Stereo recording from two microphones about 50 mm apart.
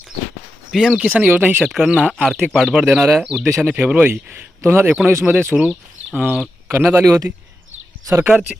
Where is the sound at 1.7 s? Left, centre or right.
Centre.